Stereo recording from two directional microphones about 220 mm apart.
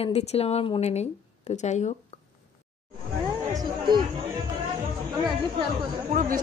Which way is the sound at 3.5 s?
20° right (ahead or behind).